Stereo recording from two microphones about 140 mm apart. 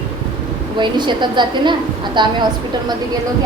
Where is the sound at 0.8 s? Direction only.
35° right (ahead or behind).